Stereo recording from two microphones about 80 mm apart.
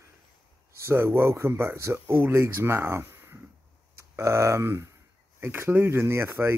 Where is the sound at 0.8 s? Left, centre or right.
Right.